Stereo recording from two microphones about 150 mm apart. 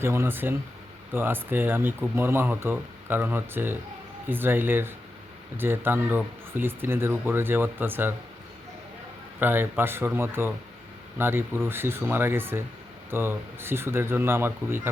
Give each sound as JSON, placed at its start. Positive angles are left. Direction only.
{"t": 0.0, "sound": "speech", "side_deg": -15}
{"t": 9.4, "sound": "speech", "side_deg": -15}